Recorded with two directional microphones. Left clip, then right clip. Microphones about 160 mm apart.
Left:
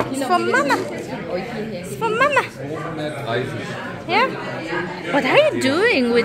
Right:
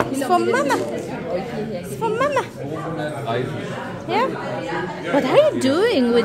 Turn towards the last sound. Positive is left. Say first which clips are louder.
# left 1 dB
turn(degrees=-20)  # may be behind; listen again after turning